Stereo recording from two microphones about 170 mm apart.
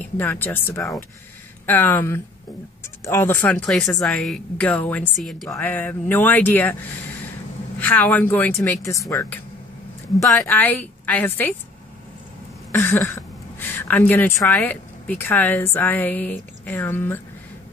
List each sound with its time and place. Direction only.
0.0 s speech: 10° left (ahead or behind)
7.8 s speech: 10° left (ahead or behind)
10.4 s speech: 10° left (ahead or behind)
12.7 s a woman's voice: 15° left (ahead or behind)